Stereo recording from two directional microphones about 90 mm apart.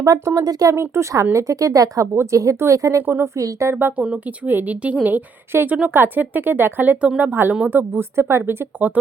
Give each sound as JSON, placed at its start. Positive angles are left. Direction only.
{"t": 0.0, "sound": "speech", "side_deg": -40}
{"t": 3.0, "sound": "speech", "side_deg": -25}
{"t": 3.3, "sound": "speech", "side_deg": -35}
{"t": 3.8, "sound": "speech", "side_deg": -25}